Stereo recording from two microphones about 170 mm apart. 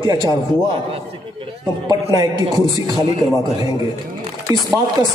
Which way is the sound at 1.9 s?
20° right (ahead or behind).